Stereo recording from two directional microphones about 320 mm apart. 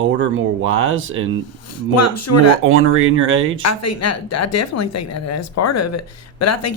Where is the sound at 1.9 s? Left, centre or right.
Left.